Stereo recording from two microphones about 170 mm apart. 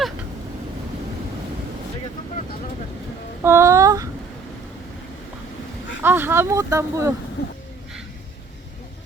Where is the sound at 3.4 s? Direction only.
15° right (ahead or behind).